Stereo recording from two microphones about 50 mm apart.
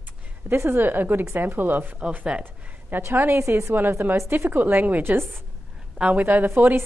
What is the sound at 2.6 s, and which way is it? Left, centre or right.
A woman's voice, right.